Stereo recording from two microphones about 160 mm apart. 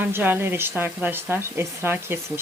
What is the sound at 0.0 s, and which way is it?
Speech, 10° right (ahead or behind).